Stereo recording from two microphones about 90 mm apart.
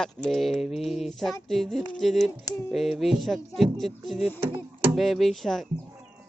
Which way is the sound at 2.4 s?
40° left (ahead or behind).